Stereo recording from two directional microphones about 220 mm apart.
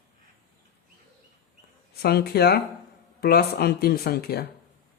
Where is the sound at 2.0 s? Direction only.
45° left (ahead or behind).